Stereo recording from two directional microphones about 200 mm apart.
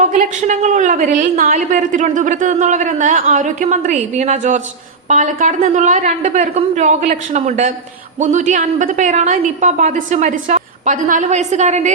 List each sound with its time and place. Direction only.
0.0 s a woman's voice: 40° right (ahead or behind)